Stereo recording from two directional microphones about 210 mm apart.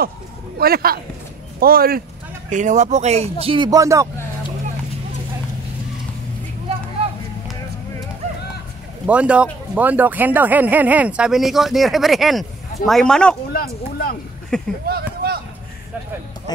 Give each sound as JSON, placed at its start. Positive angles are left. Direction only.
{"t": 0.6, "sound": "a man's voice", "side_deg": -45}
{"t": 9.0, "sound": "speech", "side_deg": -5}
{"t": 13.5, "sound": "speech", "side_deg": 45}
{"t": 14.5, "sound": "speech", "side_deg": 5}
{"t": 14.9, "sound": "speech", "side_deg": -45}
{"t": 16.5, "sound": "music", "side_deg": 20}